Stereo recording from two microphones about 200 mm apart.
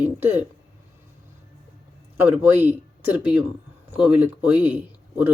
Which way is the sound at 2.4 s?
10° right (ahead or behind).